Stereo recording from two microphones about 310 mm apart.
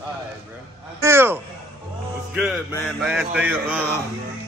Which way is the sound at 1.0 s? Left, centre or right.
Centre.